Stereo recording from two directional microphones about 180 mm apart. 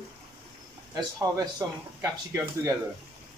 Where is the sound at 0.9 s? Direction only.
20° right (ahead or behind).